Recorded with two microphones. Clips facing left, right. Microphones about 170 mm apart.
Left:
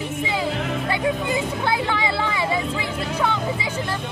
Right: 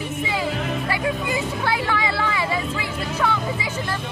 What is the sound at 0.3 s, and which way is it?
Music, 20° left (ahead or behind).